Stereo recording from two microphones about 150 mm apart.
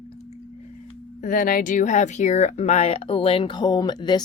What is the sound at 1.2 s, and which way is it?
Speech, 65° left (ahead or behind).